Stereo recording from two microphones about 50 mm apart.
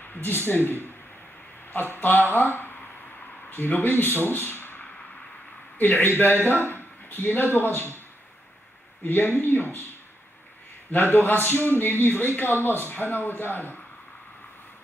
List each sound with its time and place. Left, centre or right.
0.0 s a man's voice: left
9.0 s a man's voice: left